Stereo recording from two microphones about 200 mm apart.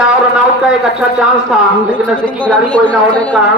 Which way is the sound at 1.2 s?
Centre (ahead or behind).